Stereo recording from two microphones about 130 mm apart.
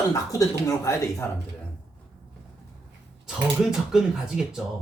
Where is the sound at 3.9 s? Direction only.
5° right (ahead or behind).